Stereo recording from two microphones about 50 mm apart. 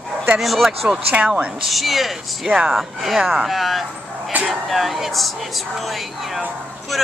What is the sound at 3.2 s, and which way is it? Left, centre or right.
Speech, centre.